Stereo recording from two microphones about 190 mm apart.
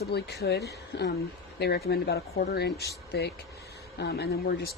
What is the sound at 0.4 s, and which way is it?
A woman's voice, 60° left (ahead or behind).